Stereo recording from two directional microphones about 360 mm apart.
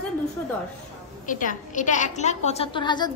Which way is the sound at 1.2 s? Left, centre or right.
Left.